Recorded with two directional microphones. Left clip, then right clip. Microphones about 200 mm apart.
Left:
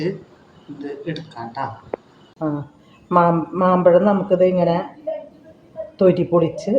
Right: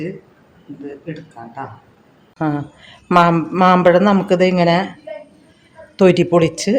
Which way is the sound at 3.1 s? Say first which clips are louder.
Right 3 dB; 65° right (ahead or behind).